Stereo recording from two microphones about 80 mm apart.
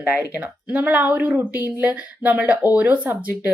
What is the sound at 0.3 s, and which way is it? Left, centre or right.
Speech, right.